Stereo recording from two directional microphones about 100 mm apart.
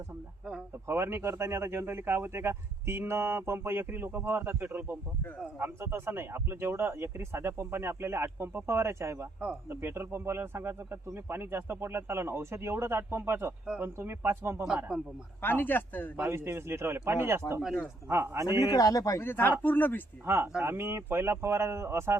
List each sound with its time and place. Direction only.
0.9 s speech: 25° right (ahead or behind)
14.9 s a man's voice: 5° right (ahead or behind)
15.4 s speech: 20° left (ahead or behind)
16.1 s speech: 20° right (ahead or behind)
18.6 s speech: 35° left (ahead or behind)
19.2 s speech: 20° left (ahead or behind)
20.2 s speech: 25° right (ahead or behind)